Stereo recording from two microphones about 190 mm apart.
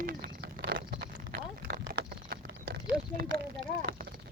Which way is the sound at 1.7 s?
55° right (ahead or behind).